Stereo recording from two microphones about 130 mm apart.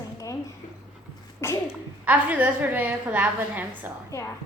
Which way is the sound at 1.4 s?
20° left (ahead or behind).